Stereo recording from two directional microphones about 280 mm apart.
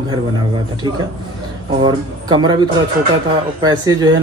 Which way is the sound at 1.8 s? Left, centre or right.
Centre.